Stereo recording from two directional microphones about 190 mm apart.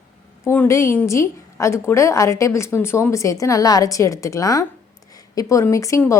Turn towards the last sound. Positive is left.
turn(degrees=15)  # may be behind; listen again after turning